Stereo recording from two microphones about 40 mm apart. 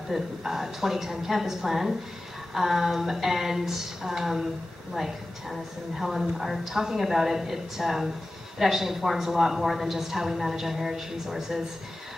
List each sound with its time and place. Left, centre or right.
0.1 s a woman's voice: centre